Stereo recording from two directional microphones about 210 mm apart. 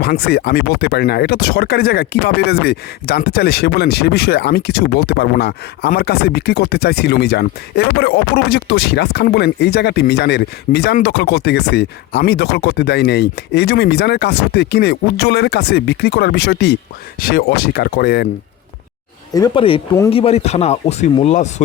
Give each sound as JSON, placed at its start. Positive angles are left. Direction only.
{"t": 0.0, "sound": "speech", "side_deg": 50}
{"t": 19.3, "sound": "speech", "side_deg": 20}